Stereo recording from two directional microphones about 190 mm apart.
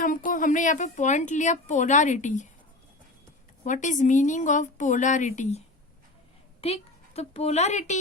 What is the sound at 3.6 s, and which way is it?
A woman's voice, 40° left (ahead or behind).